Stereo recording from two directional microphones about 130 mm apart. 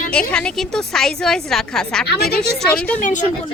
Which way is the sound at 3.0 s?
70° left (ahead or behind).